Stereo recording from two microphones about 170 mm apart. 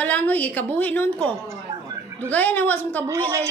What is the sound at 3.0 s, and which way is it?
Speech, 20° right (ahead or behind).